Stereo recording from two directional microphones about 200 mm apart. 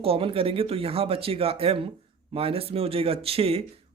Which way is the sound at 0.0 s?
30° right (ahead or behind).